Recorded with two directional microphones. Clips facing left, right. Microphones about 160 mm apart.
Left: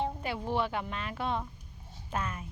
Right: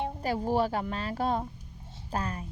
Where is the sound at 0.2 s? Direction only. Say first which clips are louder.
Right 5 dB; 40° right (ahead or behind).